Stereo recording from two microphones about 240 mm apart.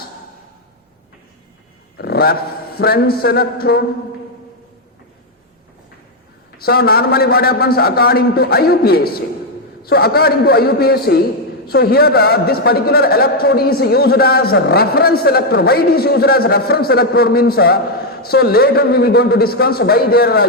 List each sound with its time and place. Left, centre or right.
2.0 s a man's voice: left
6.6 s a man's voice: left